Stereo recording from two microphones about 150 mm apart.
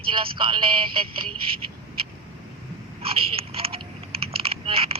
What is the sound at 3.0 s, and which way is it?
Biting, 40° right (ahead or behind).